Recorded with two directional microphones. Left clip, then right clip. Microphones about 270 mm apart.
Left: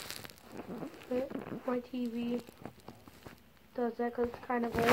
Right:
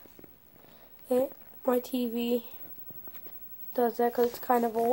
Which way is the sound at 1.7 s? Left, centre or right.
Right.